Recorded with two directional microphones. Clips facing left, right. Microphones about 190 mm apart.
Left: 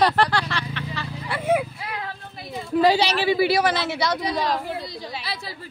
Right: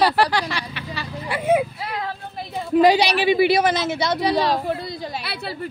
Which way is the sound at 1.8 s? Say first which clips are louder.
Right 4 dB; 35° right (ahead or behind).